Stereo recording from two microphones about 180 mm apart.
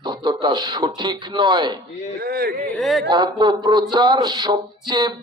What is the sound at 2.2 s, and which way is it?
Speech, 55° right (ahead or behind).